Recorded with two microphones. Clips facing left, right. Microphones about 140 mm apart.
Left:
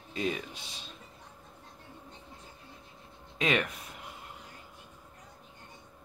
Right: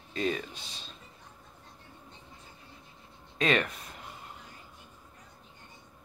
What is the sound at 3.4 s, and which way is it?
Speech, 15° left (ahead or behind).